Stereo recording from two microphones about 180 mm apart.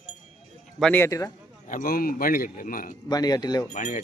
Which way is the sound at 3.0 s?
20° left (ahead or behind).